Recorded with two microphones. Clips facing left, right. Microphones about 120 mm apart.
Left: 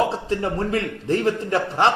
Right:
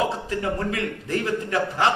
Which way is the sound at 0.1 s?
30° left (ahead or behind).